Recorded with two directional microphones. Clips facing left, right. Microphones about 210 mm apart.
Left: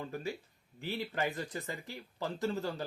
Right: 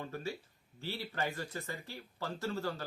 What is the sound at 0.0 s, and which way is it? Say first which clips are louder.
Speech: left 2 dB; 15° left (ahead or behind).